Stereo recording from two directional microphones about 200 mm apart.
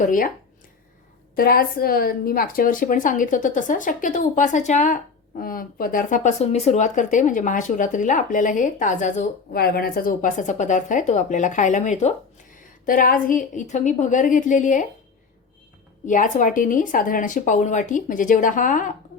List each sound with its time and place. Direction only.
0.0 s speech: 45° left (ahead or behind)
1.4 s speech: 50° left (ahead or behind)
16.0 s speech: 40° left (ahead or behind)